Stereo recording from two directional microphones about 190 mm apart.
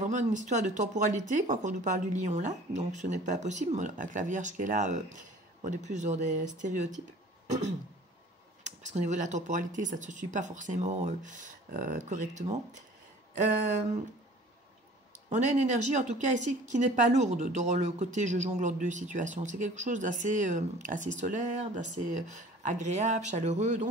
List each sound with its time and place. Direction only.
0.0 s a woman's voice: 40° right (ahead or behind)
8.6 s a woman's voice: 40° right (ahead or behind)
15.2 s a woman's voice: 40° right (ahead or behind)